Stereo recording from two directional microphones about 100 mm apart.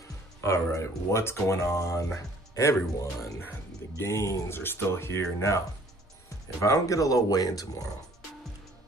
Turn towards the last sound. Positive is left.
turn(degrees=40)  # may be behind; listen again after turning